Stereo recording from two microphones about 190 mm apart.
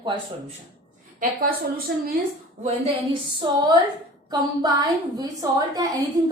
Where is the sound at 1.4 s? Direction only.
50° right (ahead or behind).